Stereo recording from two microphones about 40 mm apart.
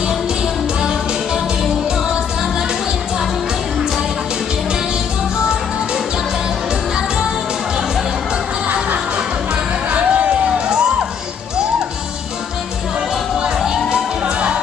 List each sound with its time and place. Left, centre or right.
9.9 s music: right